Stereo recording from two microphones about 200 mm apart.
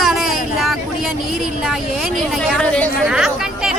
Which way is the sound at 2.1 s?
Centre (ahead or behind).